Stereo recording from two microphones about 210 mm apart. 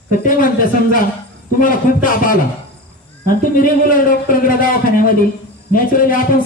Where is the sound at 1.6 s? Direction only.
40° left (ahead or behind).